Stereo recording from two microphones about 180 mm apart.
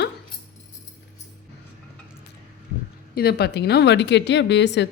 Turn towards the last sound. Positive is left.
turn(degrees=75)  # may be behind; listen again after turning